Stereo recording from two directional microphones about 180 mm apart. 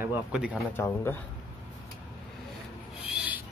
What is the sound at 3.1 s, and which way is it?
Filing, 5° right (ahead or behind).